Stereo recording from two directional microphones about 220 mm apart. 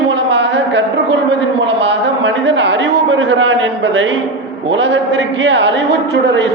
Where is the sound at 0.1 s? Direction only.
50° right (ahead or behind).